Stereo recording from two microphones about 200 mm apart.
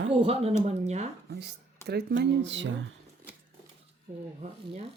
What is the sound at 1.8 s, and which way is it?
Speech, 55° right (ahead or behind).